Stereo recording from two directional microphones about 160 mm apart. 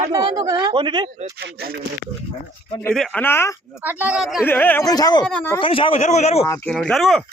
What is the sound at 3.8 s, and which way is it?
Speech, 10° right (ahead or behind).